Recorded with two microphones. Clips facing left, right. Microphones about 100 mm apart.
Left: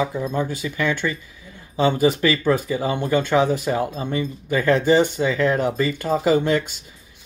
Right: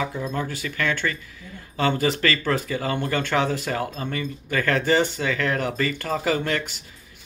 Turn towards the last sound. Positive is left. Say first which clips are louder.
# left 6 dB
turn(degrees=20)  # may be behind; listen again after turning